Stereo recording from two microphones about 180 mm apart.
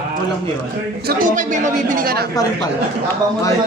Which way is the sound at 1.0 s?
50° right (ahead or behind).